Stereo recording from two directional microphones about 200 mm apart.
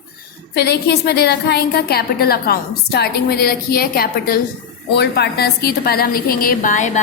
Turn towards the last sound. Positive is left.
turn(degrees=40)  # may be behind; listen again after turning